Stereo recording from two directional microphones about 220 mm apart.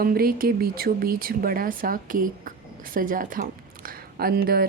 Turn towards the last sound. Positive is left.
turn(degrees=-45)  # may be behind; listen again after turning